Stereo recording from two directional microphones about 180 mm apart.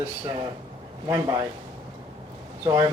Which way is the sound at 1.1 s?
20° right (ahead or behind).